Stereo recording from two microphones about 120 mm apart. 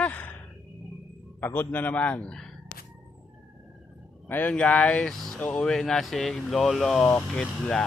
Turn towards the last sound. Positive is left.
turn(degrees=5)  # may be behind; listen again after turning